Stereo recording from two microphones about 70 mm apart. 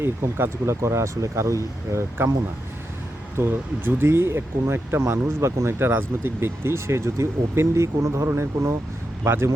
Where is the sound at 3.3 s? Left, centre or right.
Right.